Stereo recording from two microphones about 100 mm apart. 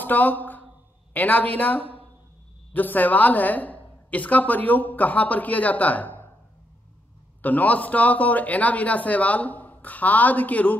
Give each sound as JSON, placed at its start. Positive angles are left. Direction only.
{"t": 0.0, "sound": "a sound", "side_deg": 15}
{"t": 1.1, "sound": "a woman's voice", "side_deg": 15}
{"t": 7.4, "sound": "speech", "side_deg": 15}